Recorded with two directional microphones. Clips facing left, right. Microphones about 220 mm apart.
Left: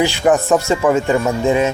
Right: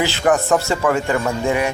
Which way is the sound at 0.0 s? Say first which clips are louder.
Left 3 dB; 15° left (ahead or behind).